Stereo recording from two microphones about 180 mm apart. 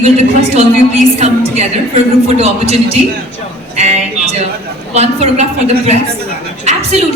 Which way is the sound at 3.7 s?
40° right (ahead or behind).